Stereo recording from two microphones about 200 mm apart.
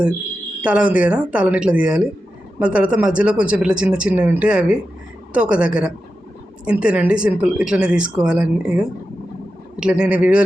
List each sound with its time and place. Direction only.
0.6 s speech: 5° right (ahead or behind)